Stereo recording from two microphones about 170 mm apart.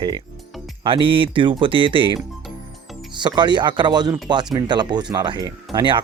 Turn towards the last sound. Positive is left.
turn(degrees=-30)  # may be behind; listen again after turning